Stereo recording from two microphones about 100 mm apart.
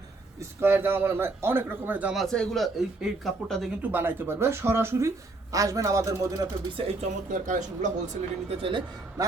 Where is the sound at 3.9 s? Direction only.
20° right (ahead or behind).